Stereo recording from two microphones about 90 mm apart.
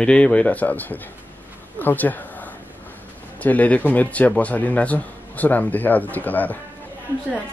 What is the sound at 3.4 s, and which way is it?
A man's voice, 15° left (ahead or behind).